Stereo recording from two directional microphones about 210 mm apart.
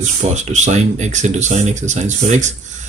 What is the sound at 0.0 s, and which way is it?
Speech, 35° right (ahead or behind).